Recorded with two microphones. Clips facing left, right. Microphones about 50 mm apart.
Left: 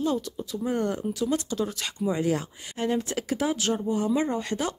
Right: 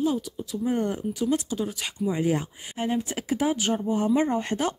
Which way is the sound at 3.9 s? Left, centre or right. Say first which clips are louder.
Right 3 dB; right.